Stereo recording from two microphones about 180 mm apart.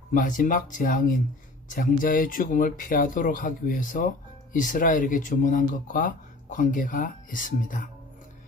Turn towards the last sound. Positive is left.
turn(degrees=50)  # may be behind; listen again after turning